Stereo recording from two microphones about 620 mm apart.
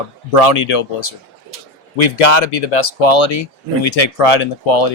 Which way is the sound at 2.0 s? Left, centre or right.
Left.